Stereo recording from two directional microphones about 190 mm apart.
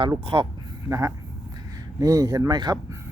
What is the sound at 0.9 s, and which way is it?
Speech, 15° right (ahead or behind).